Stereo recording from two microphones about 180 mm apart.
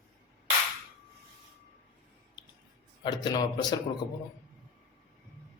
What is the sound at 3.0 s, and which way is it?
Speech, 25° left (ahead or behind).